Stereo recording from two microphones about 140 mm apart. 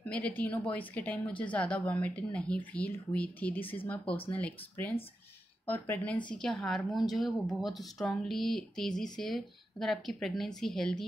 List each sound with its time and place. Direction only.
0.4 s a woman's voice: 10° left (ahead or behind)